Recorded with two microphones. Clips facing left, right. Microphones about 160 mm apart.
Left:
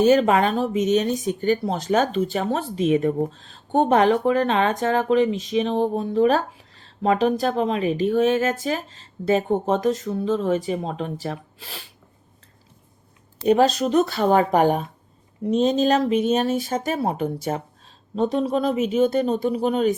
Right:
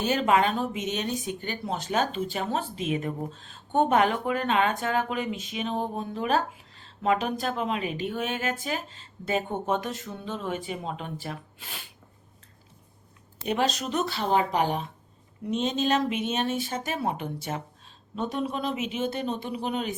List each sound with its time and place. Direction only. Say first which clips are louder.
0.0 s speech: left 7 dB; 40° left (ahead or behind)
13.4 s speech: left 10 dB; 40° left (ahead or behind)
15.4 s speech: left 7 dB; 40° left (ahead or behind)